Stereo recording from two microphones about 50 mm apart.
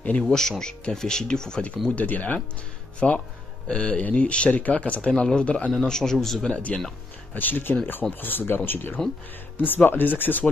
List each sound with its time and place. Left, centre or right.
0.3 s speech: centre
1.9 s speech: left
3.0 s speech: centre
5.7 s speech: centre
6.5 s speech: left
7.3 s speech: left